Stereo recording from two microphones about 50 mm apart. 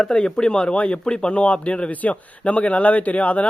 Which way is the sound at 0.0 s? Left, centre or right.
Centre.